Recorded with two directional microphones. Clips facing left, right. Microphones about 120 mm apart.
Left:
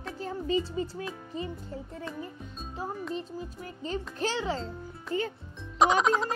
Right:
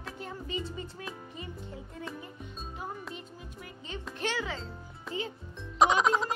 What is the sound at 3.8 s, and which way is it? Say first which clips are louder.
Speech: left 4 dB; 35° left (ahead or behind).